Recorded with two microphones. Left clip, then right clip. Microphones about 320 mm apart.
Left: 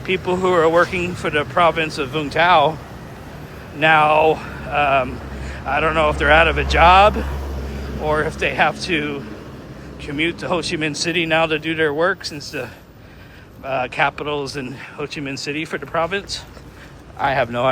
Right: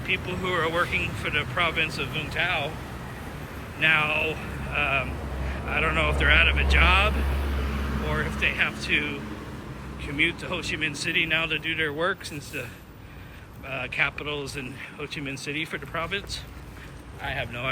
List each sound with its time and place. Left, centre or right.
0.1 s speech: centre
2.1 s speech: left
3.8 s speech: centre
13.7 s speech: centre
17.2 s speech: left